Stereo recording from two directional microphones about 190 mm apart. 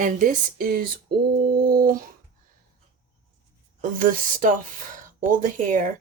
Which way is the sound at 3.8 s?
45° right (ahead or behind).